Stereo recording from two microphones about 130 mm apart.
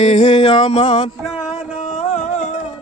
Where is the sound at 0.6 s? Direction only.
55° left (ahead or behind).